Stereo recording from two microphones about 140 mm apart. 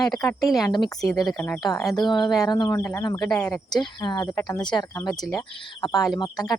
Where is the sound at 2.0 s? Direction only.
30° left (ahead or behind).